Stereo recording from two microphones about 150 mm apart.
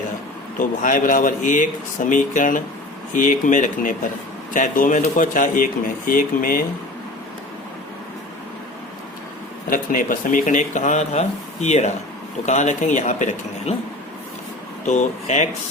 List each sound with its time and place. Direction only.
0.6 s speech: 65° left (ahead or behind)
9.6 s speech: 65° left (ahead or behind)
14.8 s speech: 50° left (ahead or behind)